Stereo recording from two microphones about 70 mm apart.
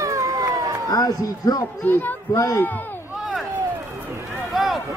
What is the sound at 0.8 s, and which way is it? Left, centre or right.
Speech, left.